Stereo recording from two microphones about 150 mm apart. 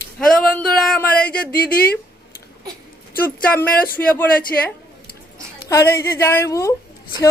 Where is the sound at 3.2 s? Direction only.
15° left (ahead or behind).